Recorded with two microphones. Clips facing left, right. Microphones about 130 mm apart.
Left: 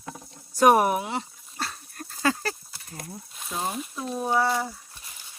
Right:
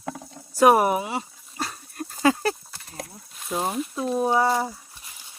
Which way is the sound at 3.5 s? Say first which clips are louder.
Right 5 dB; 15° right (ahead or behind).